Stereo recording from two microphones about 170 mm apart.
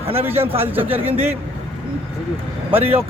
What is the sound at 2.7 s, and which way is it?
Speech, 10° right (ahead or behind).